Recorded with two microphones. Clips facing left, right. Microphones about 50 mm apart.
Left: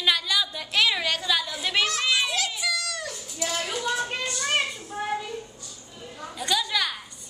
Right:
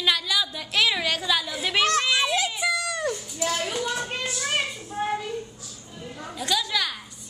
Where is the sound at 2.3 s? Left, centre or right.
Right.